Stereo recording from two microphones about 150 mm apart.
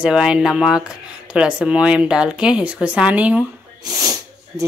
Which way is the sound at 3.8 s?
20° right (ahead or behind).